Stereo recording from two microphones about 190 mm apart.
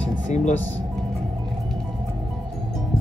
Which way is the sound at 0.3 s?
40° left (ahead or behind).